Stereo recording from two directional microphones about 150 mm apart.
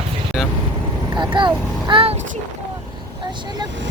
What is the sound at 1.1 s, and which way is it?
Speech, 30° right (ahead or behind).